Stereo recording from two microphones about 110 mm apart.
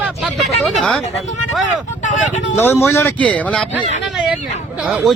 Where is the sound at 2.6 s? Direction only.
20° left (ahead or behind).